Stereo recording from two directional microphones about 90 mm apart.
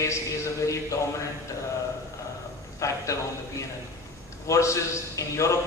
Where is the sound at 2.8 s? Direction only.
35° left (ahead or behind).